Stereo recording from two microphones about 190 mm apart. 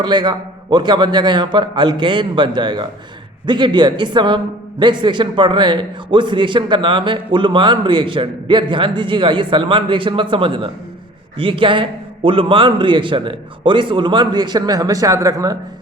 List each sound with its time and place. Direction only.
0.0 s a man's voice: 20° right (ahead or behind)